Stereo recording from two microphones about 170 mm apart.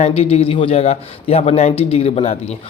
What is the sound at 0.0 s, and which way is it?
A man's voice, 35° left (ahead or behind).